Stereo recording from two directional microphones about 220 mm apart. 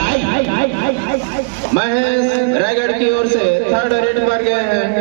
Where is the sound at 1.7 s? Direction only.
50° left (ahead or behind).